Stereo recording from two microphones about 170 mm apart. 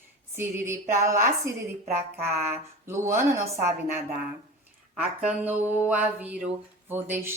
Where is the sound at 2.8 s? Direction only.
15° right (ahead or behind).